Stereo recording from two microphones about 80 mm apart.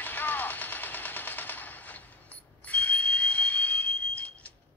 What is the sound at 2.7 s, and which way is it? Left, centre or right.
Smoke detector, centre.